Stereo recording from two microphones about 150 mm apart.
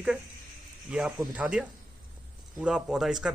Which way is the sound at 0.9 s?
5° right (ahead or behind).